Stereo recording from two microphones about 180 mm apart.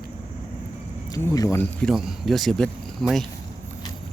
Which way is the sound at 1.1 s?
20° left (ahead or behind).